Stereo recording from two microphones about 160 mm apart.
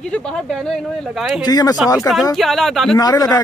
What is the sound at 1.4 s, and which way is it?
Speech, 25° left (ahead or behind).